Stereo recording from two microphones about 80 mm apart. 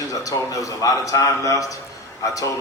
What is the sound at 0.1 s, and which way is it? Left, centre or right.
A man's voice, left.